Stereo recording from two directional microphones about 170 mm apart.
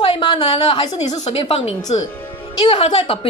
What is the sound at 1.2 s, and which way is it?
A woman's voice, 40° left (ahead or behind).